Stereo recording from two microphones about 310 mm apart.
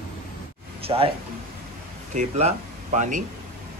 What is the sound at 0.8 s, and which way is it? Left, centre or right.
Speech, centre.